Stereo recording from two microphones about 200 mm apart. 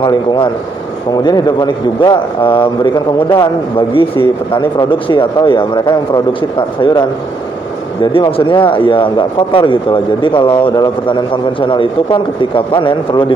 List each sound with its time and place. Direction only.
0.0 s speech: 20° left (ahead or behind)